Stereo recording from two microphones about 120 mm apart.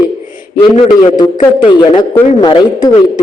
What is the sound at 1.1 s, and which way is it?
A man's voice, 35° left (ahead or behind).